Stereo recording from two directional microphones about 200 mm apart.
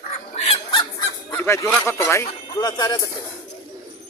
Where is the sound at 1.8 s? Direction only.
15° left (ahead or behind).